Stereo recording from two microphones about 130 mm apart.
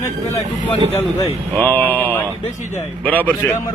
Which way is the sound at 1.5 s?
15° left (ahead or behind).